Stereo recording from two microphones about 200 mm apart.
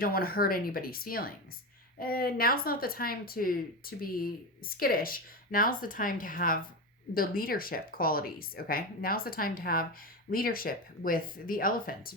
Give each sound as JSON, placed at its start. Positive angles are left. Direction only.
{"t": 0.0, "sound": "speech", "side_deg": 45}